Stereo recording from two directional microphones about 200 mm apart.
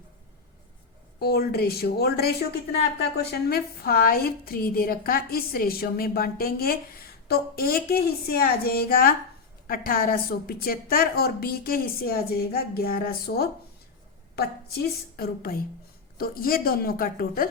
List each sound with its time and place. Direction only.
1.2 s a woman's voice: 50° left (ahead or behind)